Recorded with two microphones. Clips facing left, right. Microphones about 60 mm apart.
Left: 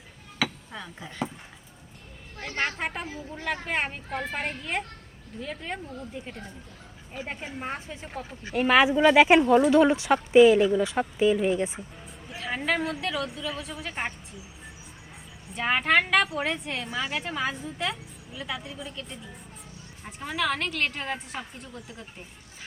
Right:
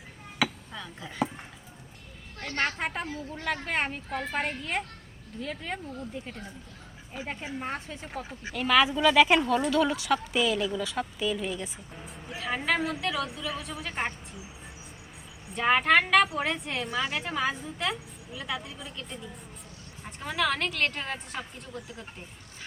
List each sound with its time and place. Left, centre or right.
0.7 s speech: centre
2.4 s a woman's voice: centre
7.1 s speech: centre
7.6 s a woman's voice: centre
8.5 s speech: left
12.0 s speech: centre
15.5 s a woman's voice: centre